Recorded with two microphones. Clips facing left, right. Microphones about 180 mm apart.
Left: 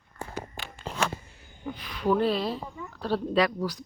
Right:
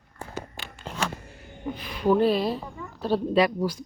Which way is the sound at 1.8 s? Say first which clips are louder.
Right 4 dB; 10° right (ahead or behind).